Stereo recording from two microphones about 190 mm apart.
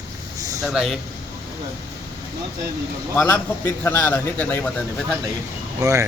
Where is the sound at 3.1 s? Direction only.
10° left (ahead or behind).